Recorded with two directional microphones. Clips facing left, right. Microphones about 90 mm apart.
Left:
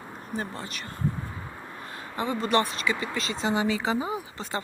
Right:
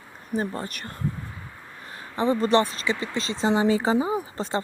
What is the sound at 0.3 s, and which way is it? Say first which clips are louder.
Speech: right 6 dB; 40° right (ahead or behind).